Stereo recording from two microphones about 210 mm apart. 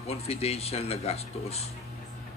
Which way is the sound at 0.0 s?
30° left (ahead or behind).